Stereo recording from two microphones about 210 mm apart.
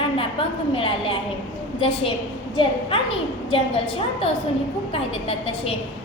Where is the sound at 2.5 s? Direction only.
25° left (ahead or behind).